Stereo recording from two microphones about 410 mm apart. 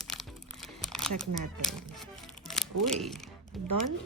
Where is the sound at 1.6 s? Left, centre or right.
Centre.